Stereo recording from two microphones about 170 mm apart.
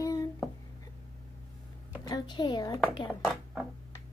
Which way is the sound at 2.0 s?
25° left (ahead or behind).